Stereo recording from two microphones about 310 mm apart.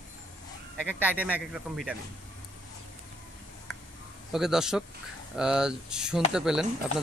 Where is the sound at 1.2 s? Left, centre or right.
Centre.